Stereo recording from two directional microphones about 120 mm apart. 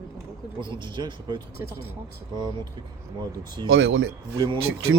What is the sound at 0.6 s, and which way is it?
Speech, 40° right (ahead or behind).